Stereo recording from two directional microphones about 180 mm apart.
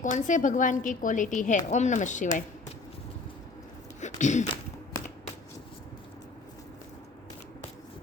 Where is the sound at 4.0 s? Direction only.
40° left (ahead or behind).